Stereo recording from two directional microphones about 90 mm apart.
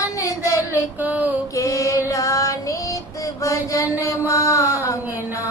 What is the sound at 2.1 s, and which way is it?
Child singing, 40° left (ahead or behind).